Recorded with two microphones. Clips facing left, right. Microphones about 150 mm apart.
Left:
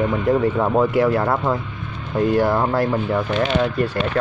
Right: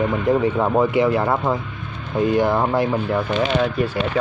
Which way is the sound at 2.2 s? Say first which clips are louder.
Even; 5° left (ahead or behind).